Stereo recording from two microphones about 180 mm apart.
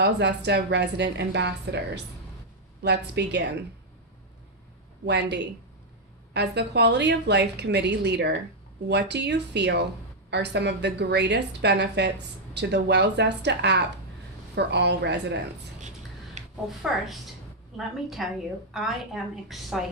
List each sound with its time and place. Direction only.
0.0 s a woman's voice: 70° right (ahead or behind)
2.8 s a woman's voice: 70° right (ahead or behind)
5.0 s a woman's voice: 70° right (ahead or behind)
16.4 s a sound: 40° right (ahead or behind)
17.7 s a woman's voice: centre (ahead or behind)